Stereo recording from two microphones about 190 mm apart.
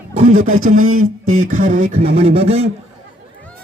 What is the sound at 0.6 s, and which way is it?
A man's voice, 90° right.